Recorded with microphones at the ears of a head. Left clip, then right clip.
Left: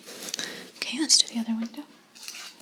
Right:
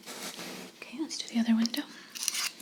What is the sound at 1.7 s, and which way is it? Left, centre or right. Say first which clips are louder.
Scissors: right 6 dB; right.